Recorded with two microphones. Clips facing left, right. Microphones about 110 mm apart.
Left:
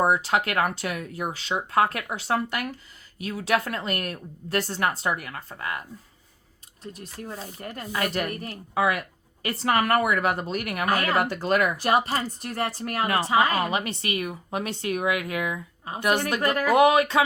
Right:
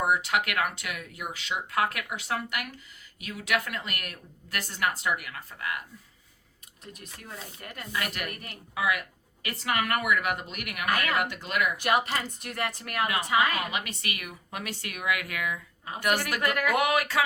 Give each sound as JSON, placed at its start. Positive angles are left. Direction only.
{"t": 0.0, "sound": "speech", "side_deg": 30}
{"t": 6.8, "sound": "speech", "side_deg": 35}